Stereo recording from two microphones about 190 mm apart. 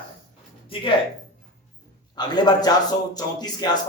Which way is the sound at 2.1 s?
20° left (ahead or behind).